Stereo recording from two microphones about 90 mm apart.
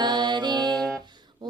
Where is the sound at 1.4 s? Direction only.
55° right (ahead or behind).